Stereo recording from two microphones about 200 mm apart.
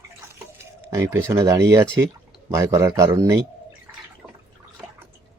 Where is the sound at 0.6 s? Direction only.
15° right (ahead or behind).